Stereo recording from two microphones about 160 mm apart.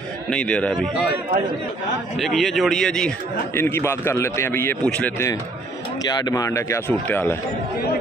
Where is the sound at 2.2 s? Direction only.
Centre (ahead or behind).